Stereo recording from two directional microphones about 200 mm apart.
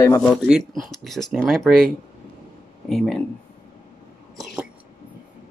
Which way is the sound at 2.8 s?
Centre (ahead or behind).